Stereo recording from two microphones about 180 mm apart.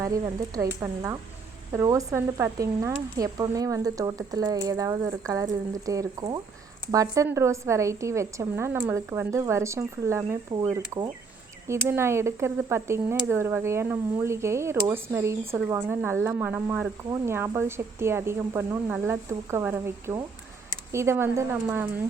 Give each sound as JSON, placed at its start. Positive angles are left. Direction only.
{"t": 0.0, "sound": "speech", "side_deg": -20}